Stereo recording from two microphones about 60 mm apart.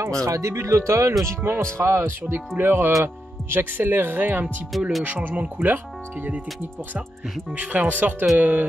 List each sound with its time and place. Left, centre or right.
0.0 s speech: right
7.5 s speech: right